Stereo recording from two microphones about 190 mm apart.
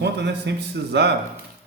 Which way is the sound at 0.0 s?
60° right (ahead or behind).